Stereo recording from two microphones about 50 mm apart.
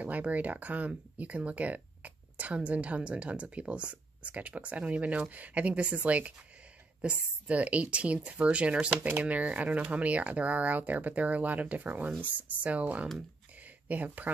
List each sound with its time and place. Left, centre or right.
0.0 s speech: right
8.9 s speech: right
9.2 s speech: right